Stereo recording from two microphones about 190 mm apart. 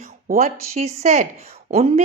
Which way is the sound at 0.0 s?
40° right (ahead or behind).